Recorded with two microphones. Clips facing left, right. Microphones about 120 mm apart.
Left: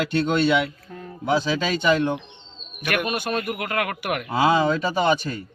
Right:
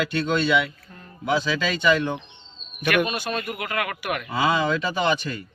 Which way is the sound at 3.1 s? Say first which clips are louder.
Left 3 dB; 55° left (ahead or behind).